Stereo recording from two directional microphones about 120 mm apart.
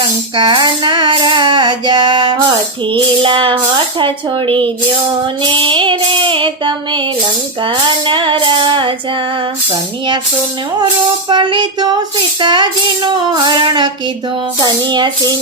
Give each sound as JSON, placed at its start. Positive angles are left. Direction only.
{"t": 0.3, "sound": "child singing", "side_deg": -40}
{"t": 7.6, "sound": "music", "side_deg": -40}
{"t": 11.3, "sound": "child singing", "side_deg": -40}